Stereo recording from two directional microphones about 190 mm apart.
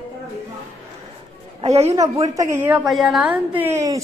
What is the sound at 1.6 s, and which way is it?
Speech, 35° right (ahead or behind).